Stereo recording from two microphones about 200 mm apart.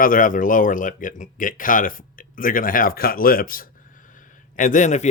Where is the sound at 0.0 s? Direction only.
45° left (ahead or behind).